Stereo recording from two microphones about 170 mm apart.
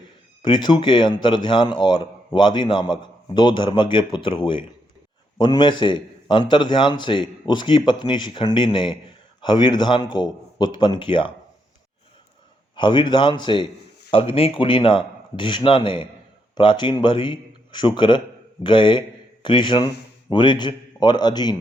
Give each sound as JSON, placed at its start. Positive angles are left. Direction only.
{"t": 0.4, "sound": "speech", "side_deg": 30}
{"t": 12.7, "sound": "a man's voice", "side_deg": 30}